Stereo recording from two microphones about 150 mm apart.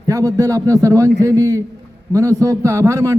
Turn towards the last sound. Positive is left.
turn(degrees=-20)  # may be behind; listen again after turning